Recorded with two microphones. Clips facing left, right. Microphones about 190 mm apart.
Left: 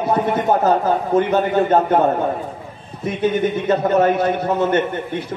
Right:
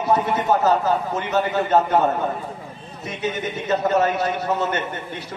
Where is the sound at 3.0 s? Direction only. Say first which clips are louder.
Left 8 dB; 55° left (ahead or behind).